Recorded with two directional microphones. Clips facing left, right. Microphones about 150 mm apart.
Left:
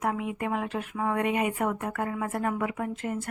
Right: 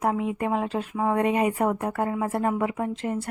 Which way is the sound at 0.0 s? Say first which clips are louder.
Right 4 dB; 30° right (ahead or behind).